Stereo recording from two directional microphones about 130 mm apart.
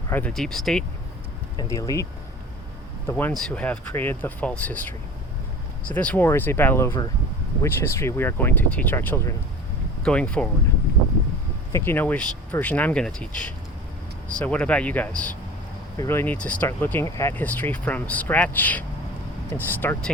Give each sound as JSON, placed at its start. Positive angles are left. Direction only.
{"t": 0.1, "sound": "speech", "side_deg": 10}
{"t": 1.5, "sound": "speech", "side_deg": 25}
{"t": 3.1, "sound": "speech", "side_deg": 15}
{"t": 10.0, "sound": "speech", "side_deg": 10}
{"t": 11.7, "sound": "speech", "side_deg": 15}